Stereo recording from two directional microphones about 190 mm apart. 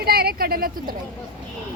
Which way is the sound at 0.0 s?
55° right (ahead or behind).